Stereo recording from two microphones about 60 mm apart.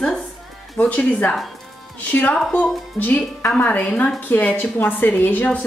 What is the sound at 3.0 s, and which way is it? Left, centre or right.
A woman's voice, left.